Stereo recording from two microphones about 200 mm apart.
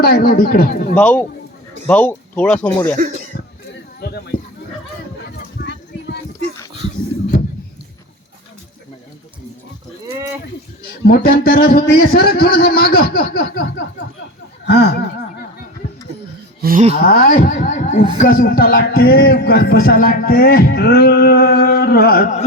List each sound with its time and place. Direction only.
0.0 s speech: 50° left (ahead or behind)
0.9 s speech: 5° left (ahead or behind)
3.3 s throat clearing: 45° left (ahead or behind)
4.0 s speech: 50° left (ahead or behind)
5.6 s a sound: 50° left (ahead or behind)
11.0 s speech: 50° left (ahead or behind)
16.6 s a sound: 45° right (ahead or behind)
16.9 s speech: 45° left (ahead or behind)